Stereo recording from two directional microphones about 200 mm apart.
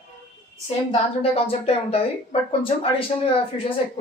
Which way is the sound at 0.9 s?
30° left (ahead or behind).